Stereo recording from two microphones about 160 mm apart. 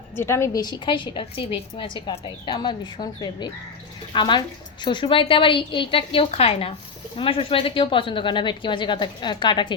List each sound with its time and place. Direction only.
0.2 s a woman's voice: 15° left (ahead or behind)